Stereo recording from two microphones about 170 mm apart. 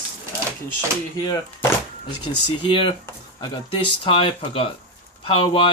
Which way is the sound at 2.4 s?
30° left (ahead or behind).